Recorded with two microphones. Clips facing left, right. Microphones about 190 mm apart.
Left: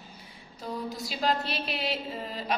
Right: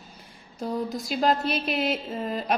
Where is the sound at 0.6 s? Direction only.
45° right (ahead or behind).